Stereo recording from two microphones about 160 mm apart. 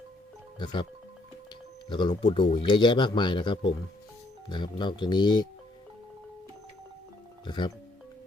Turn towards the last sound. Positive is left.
turn(degrees=30)  # may be behind; listen again after turning